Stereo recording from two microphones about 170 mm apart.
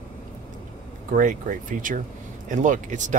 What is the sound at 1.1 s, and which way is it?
Speech, 50° right (ahead or behind).